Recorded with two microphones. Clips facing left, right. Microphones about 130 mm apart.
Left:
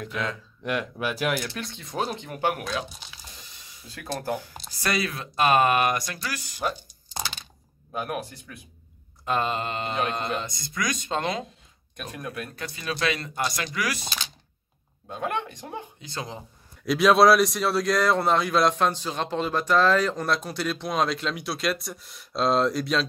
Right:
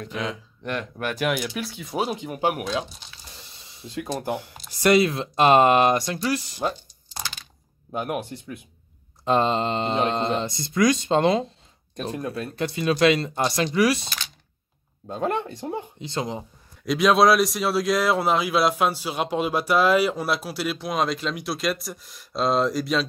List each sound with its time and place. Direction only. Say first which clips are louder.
0.7 s speech: left 1 dB; 5° left (ahead or behind); by 2.6 s 15° right (ahead or behind)
3.0 s a sound: left 1 dB; 5° left (ahead or behind)
3.5 s speech: right 14 dB; 25° right (ahead or behind)
7.9 s speech: right 3 dB; 25° right (ahead or behind)
15.0 s speech: right 4 dB; 35° right (ahead or behind)
16.8 s speech: even; centre (ahead or behind)